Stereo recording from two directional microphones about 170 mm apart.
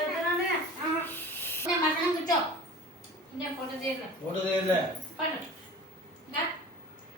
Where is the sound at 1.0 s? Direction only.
10° left (ahead or behind).